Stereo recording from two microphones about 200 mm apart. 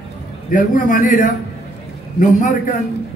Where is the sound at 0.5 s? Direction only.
40° left (ahead or behind).